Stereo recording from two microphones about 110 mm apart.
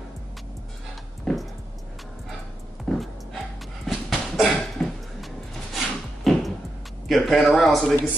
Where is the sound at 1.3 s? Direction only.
5° left (ahead or behind).